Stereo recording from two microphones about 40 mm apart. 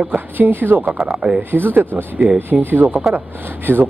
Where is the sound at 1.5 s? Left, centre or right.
Right.